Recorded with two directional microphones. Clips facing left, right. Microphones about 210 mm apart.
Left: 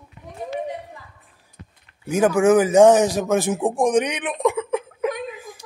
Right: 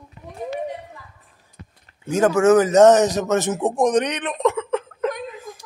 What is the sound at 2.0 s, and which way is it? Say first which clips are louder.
A man's voice: right 1 dB; 15° left (ahead or behind).